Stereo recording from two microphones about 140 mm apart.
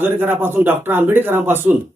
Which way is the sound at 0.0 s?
15° right (ahead or behind).